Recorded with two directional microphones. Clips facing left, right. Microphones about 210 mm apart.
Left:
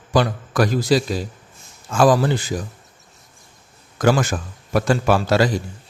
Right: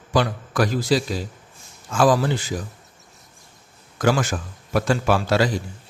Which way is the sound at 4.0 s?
45° left (ahead or behind).